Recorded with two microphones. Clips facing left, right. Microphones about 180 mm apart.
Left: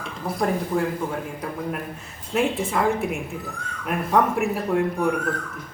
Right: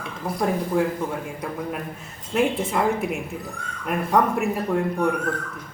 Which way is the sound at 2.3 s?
Centre (ahead or behind).